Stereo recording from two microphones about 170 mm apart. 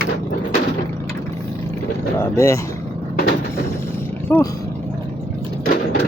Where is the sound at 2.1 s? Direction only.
15° left (ahead or behind).